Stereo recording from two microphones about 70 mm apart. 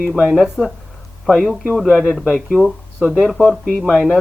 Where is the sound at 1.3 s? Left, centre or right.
Centre.